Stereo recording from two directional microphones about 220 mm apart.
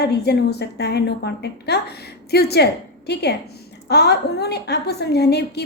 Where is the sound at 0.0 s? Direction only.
50° left (ahead or behind).